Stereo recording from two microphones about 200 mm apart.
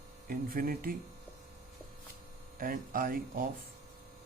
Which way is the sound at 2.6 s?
45° right (ahead or behind).